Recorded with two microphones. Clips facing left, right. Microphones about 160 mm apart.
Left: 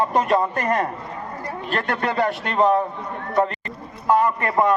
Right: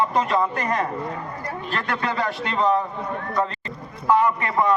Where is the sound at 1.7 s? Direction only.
50° left (ahead or behind).